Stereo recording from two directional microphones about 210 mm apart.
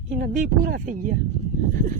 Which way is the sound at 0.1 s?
35° right (ahead or behind).